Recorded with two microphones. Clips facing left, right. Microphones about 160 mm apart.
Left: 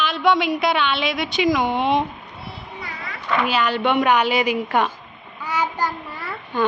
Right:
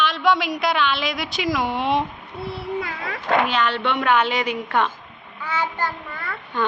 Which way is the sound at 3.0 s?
55° right (ahead or behind).